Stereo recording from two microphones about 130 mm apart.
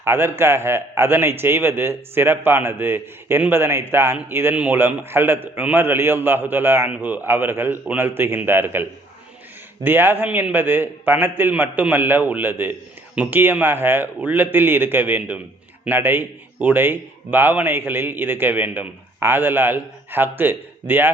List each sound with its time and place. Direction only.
0.0 s a man's voice: 15° right (ahead or behind)